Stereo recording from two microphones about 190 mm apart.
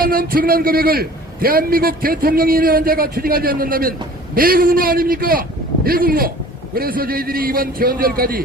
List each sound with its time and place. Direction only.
0.0 s a man's voice: 50° right (ahead or behind)